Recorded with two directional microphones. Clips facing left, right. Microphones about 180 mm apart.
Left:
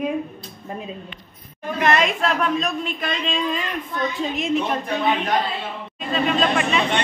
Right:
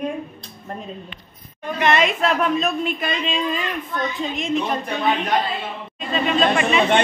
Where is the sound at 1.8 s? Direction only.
Centre (ahead or behind).